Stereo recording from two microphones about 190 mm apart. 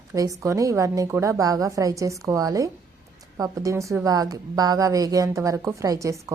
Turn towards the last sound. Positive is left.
turn(degrees=-15)  # may be behind; listen again after turning